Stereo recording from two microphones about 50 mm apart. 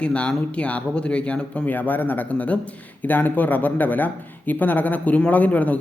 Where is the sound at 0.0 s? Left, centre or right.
Left.